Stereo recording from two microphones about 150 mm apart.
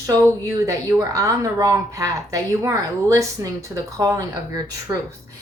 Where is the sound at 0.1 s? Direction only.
20° right (ahead or behind).